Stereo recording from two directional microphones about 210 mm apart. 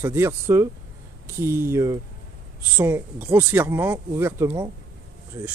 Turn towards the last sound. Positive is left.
turn(degrees=-10)  # may be behind; listen again after turning